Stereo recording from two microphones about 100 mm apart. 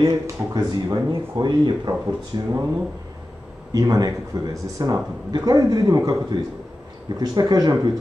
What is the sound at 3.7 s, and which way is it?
Speech, 35° right (ahead or behind).